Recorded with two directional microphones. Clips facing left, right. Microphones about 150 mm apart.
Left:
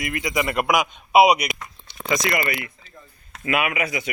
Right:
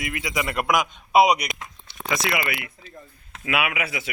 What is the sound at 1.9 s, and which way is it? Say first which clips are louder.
A man's voice: left 2 dB; 5° right (ahead or behind).